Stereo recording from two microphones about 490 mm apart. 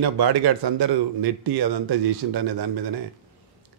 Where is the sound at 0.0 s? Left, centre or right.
Right.